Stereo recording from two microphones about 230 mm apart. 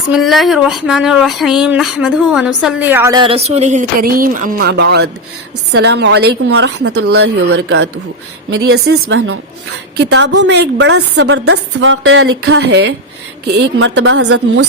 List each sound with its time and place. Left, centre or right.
0.1 s a sound: centre; by 5.0 s right
5.7 s a woman's voice: right
11.4 s a woman's voice: right